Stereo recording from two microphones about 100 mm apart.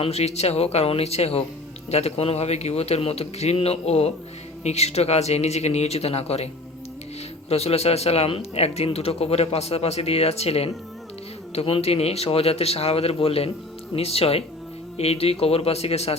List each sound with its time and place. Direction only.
0.0 s a man's voice: 90° left
7.5 s a man's voice: 90° left
11.5 s a man's voice: 80° left
14.9 s a man's voice: 90° left